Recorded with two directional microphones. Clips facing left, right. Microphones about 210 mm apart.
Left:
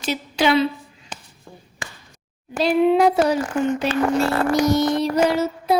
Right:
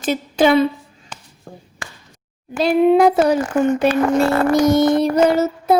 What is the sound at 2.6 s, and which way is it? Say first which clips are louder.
Speech: right 3 dB; 45° right (ahead or behind).